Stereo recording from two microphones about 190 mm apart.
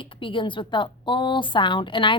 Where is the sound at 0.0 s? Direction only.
25° left (ahead or behind).